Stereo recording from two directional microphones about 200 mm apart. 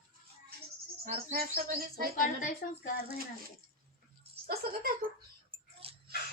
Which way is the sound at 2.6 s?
45° left (ahead or behind).